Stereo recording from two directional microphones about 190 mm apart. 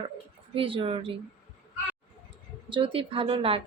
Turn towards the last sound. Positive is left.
turn(degrees=-30)  # may be behind; listen again after turning